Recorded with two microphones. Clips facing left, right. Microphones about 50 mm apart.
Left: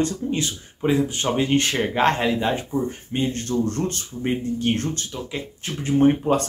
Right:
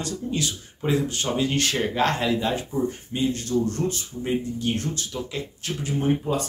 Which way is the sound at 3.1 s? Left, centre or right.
Left.